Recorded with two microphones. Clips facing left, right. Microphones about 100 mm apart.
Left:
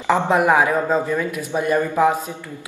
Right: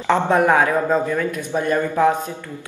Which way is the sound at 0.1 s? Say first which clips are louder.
Even; 10° left (ahead or behind).